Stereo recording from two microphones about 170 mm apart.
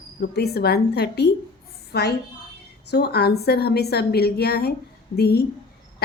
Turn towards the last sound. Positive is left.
turn(degrees=70)  # may be behind; listen again after turning